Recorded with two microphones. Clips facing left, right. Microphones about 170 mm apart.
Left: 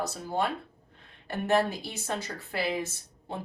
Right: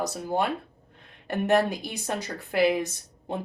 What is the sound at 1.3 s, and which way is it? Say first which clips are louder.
Speech: right 3 dB; 15° right (ahead or behind).